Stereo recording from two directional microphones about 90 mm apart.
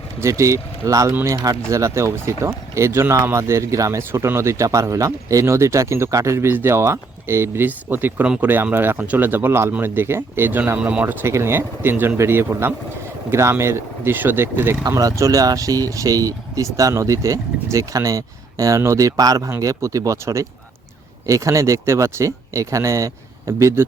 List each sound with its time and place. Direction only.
0.2 s speech: 35° right (ahead or behind)
14.8 s speech: 45° right (ahead or behind)